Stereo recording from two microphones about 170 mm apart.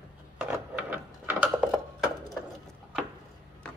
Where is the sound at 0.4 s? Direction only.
10° right (ahead or behind).